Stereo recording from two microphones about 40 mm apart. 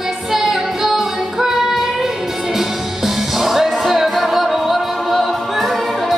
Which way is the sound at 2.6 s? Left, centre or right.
Centre.